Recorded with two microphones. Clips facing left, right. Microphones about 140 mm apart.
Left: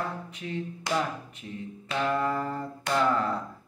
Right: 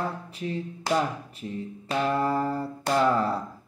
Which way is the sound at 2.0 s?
35° right (ahead or behind).